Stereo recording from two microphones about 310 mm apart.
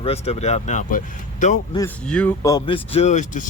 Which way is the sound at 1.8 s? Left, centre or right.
Centre.